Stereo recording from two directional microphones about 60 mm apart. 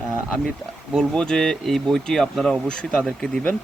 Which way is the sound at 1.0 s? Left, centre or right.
Centre.